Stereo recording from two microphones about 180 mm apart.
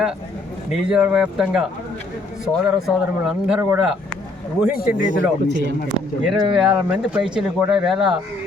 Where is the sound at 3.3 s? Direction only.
5° right (ahead or behind).